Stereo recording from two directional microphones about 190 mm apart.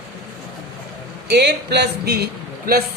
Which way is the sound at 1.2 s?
60° right (ahead or behind).